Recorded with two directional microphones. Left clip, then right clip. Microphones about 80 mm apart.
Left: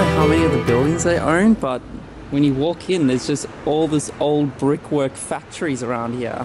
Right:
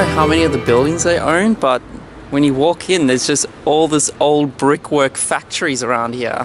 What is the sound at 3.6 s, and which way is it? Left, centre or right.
Speech, left.